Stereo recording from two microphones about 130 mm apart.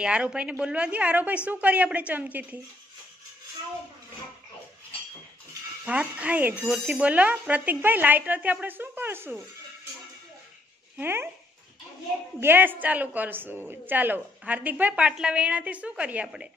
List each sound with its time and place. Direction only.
0.0 s a woman's voice: 5° right (ahead or behind)
5.9 s a woman's voice: 10° right (ahead or behind)
11.0 s a woman's voice: 15° right (ahead or behind)
12.4 s a woman's voice: 15° right (ahead or behind)